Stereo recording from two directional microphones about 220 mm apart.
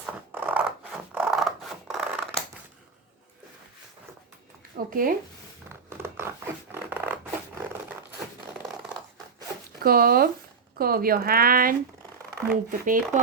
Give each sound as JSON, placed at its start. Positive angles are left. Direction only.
{"t": 0.0, "sound": "scissors", "side_deg": -10}
{"t": 4.9, "sound": "speech", "side_deg": -40}
{"t": 5.6, "sound": "zipper", "side_deg": -10}
{"t": 9.8, "sound": "speech", "side_deg": -40}